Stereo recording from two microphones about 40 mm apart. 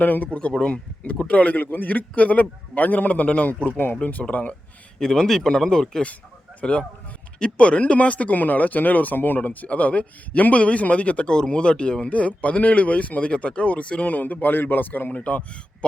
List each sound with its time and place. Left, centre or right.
0.0 s speech: left
0.3 s a man's voice: left
1.6 s a man's voice: left
3.7 s speech: left
4.2 s a man's voice: left
4.9 s speech: centre
6.6 s a man's voice: left
9.4 s a man's voice: left
14.1 s speech: left
15.2 s a man's voice: left